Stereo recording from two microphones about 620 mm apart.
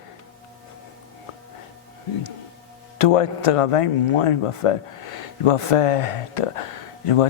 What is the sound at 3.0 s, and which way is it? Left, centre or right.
Speech, left.